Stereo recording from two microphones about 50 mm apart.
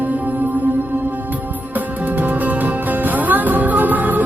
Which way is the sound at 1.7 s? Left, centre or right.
Right.